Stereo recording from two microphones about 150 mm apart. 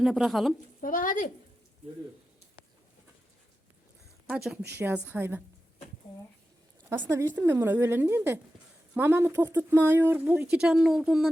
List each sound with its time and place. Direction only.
0.0 s a woman's voice: centre (ahead or behind)
0.8 s speech: 65° left (ahead or behind)
4.3 s speech: 5° right (ahead or behind)
7.1 s speech: 15° right (ahead or behind)